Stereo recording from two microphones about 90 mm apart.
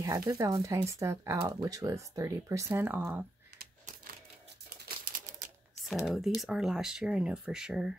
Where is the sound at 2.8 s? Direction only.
20° right (ahead or behind).